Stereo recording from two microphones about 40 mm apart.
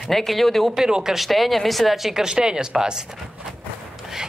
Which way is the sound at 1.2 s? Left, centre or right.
Centre.